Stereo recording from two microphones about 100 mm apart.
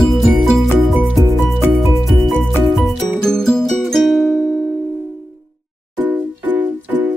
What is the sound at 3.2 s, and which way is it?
Music, 5° left (ahead or behind).